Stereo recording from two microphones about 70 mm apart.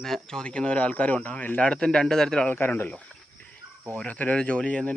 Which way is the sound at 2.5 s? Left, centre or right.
Left.